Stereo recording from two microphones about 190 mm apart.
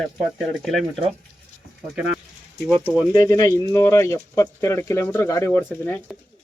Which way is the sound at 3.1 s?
20° left (ahead or behind).